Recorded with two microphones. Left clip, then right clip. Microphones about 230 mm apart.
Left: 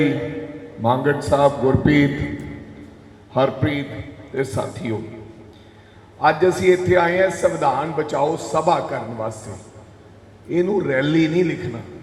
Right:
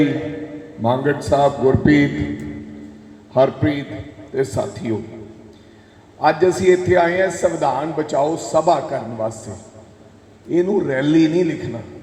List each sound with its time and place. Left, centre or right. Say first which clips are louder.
0.8 s a man's voice: even; right
3.3 s a man's voice: right 3 dB; right
6.1 s a man's voice: right 1 dB; right
10.5 s a man's voice: right 1 dB; right